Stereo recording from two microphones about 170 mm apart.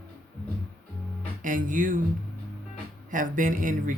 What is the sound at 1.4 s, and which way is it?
Speech, 50° right (ahead or behind).